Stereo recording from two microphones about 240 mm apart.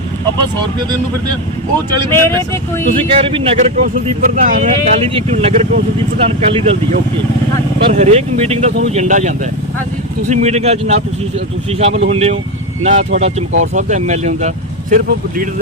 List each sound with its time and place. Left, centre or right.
2.1 s speech: centre
3.1 s speech: right